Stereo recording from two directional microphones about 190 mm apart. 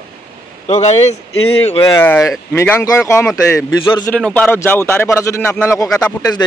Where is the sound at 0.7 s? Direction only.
35° left (ahead or behind).